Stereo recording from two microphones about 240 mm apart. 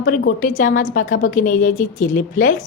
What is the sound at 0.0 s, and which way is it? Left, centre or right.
A woman's voice, left.